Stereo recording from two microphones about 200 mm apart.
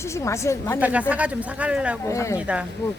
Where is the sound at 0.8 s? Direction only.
5° right (ahead or behind).